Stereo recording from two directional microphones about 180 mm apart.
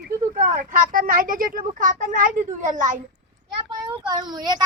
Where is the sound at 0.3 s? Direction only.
50° right (ahead or behind).